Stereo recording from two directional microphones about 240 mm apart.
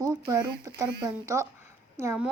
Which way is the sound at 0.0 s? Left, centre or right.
Centre.